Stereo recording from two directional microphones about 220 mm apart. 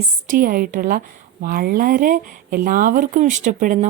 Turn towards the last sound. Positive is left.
turn(degrees=-35)  # may be behind; listen again after turning